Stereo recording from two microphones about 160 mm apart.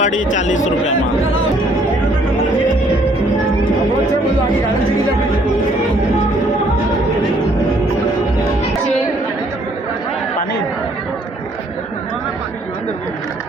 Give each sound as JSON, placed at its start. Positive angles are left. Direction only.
{"t": 0.0, "sound": "speech", "side_deg": 50}